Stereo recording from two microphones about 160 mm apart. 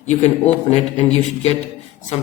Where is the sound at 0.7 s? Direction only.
40° left (ahead or behind).